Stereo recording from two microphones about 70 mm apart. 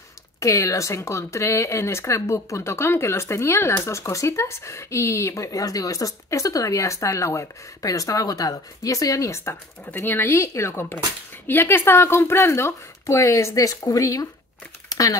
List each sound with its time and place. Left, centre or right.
0.4 s speech: left
9.8 s speech: left
14.9 s crumpling: left